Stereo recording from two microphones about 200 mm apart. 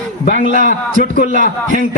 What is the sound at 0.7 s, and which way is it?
Speech, 45° left (ahead or behind).